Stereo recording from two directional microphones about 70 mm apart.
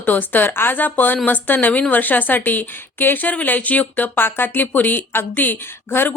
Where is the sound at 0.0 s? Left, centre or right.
Left.